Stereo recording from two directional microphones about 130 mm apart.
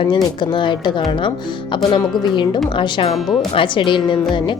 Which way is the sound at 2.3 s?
35° left (ahead or behind).